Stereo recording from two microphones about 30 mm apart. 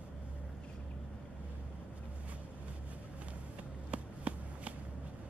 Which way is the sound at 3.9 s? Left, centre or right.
Right.